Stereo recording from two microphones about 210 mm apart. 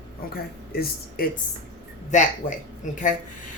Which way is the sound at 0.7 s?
45° left (ahead or behind).